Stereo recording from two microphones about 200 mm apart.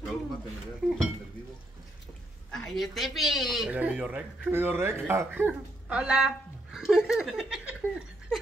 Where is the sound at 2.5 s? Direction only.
Centre (ahead or behind).